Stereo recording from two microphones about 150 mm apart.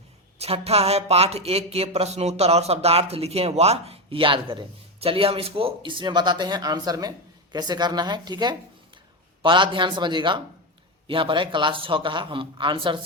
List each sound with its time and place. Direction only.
0.3 s speech: 45° right (ahead or behind)